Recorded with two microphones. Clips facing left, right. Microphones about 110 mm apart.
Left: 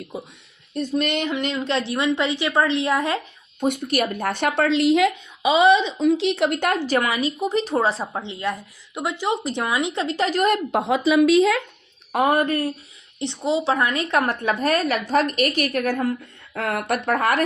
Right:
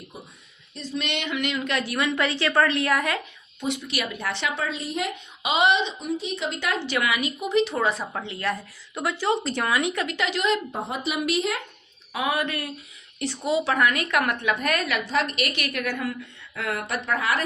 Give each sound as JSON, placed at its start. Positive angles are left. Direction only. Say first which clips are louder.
{"t": 0.7, "sound": "a woman's voice", "louder": "left 7 dB", "side_deg": 50}
{"t": 3.6, "sound": "a woman's voice", "louder": "left 7 dB", "side_deg": 50}
{"t": 6.1, "sound": "a woman's voice", "louder": "left 9 dB", "side_deg": 85}
{"t": 10.7, "sound": "speech", "louder": "left 9 dB", "side_deg": 90}
{"t": 12.1, "sound": "a woman's voice", "louder": "left 7 dB", "side_deg": 50}
{"t": 13.1, "sound": "a woman's voice", "louder": "left 2 dB", "side_deg": 20}
{"t": 16.6, "sound": "a woman's voice", "louder": "left 5 dB", "side_deg": 50}